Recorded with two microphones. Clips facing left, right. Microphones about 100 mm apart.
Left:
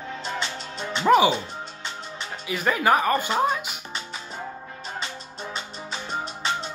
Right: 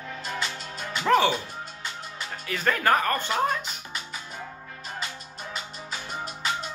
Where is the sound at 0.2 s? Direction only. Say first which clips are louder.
Left 1 dB; 25° left (ahead or behind).